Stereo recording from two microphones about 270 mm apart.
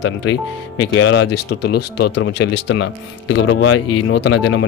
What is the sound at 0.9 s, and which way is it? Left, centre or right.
Speech, left.